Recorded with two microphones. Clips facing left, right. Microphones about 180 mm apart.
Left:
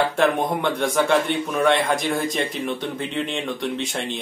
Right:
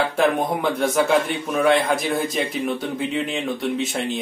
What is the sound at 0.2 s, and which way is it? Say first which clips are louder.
A man's voice: right 2 dB; centre (ahead or behind).